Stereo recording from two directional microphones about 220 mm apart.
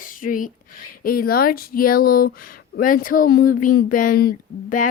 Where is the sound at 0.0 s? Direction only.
40° left (ahead or behind).